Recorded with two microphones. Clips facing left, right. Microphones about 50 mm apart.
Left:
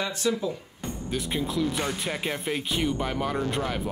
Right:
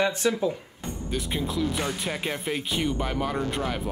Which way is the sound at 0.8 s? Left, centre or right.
Centre.